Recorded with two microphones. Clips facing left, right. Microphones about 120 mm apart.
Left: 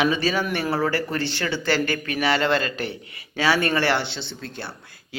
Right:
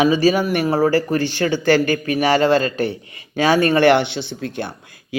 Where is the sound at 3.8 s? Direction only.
20° right (ahead or behind).